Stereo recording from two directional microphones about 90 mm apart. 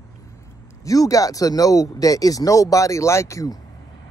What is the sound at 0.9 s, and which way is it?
Speech, 40° left (ahead or behind).